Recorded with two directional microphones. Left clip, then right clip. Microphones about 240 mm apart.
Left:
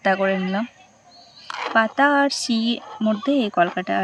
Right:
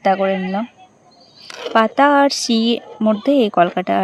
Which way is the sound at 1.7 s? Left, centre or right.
Right.